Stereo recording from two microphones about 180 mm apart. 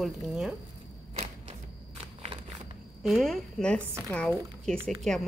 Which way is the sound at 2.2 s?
35° right (ahead or behind).